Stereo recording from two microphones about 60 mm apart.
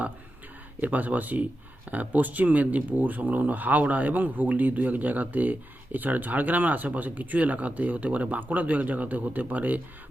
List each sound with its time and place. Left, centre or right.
0.8 s speech: right